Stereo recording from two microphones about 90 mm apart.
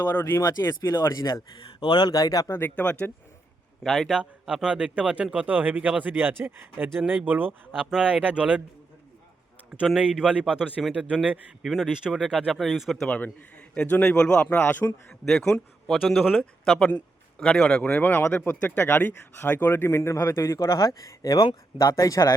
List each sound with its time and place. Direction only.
0.3 s a man's voice: 45° left (ahead or behind); by 2.1 s 60° left (ahead or behind)
2.1 s speech: 40° left (ahead or behind)
2.5 s a man's voice: 20° left (ahead or behind)
3.8 s speech: centre (ahead or behind)
4.2 s speech: 10° right (ahead or behind)
9.8 s speech: 5° right (ahead or behind)
10.8 s speech: centre (ahead or behind)
11.1 s speech: 15° right (ahead or behind)
11.6 s speech: centre (ahead or behind)
13.1 s a man's voice: 15° left (ahead or behind)
15.2 s speech: 5° left (ahead or behind)
17.8 s speech: 20° left (ahead or behind); by 22.4 s 40° left (ahead or behind)